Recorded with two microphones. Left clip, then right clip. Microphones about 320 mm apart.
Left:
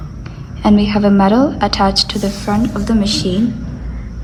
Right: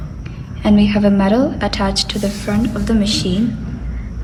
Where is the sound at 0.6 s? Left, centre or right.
Centre.